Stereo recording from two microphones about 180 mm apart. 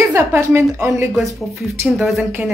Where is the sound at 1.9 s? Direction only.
Centre (ahead or behind).